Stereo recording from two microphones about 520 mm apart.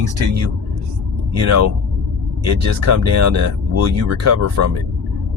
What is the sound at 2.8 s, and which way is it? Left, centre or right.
Speech, right.